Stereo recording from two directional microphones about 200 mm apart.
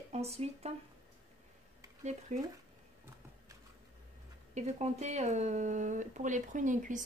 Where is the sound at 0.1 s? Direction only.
30° right (ahead or behind).